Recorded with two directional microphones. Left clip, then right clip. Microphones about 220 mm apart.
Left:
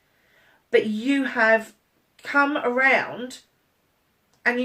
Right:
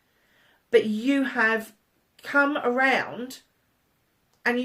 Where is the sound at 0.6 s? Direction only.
40° right (ahead or behind).